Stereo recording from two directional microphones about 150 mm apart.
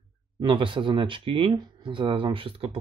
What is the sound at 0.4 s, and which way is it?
Speech, 35° right (ahead or behind).